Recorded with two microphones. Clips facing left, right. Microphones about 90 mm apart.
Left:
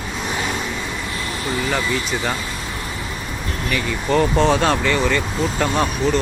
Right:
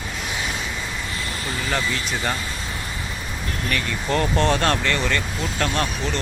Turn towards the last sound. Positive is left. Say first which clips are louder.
# left 5 dB
turn(degrees=10)  # may be behind; listen again after turning